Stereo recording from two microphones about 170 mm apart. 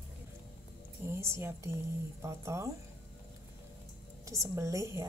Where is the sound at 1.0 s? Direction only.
15° right (ahead or behind).